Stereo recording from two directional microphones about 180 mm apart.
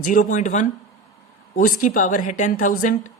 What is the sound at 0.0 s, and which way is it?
A woman's voice, 50° left (ahead or behind).